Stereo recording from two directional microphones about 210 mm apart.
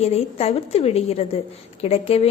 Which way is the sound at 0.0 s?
30° left (ahead or behind).